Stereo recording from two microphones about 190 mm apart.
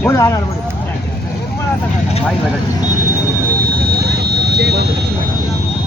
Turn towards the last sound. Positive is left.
turn(degrees=-60)  # may be behind; listen again after turning